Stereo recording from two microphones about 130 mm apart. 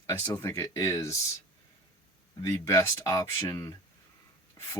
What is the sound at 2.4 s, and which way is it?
Speech, 20° left (ahead or behind).